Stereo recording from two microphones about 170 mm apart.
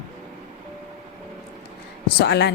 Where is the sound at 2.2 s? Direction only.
85° left.